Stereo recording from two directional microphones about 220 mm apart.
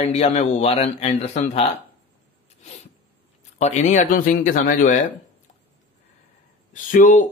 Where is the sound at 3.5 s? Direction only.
30° left (ahead or behind).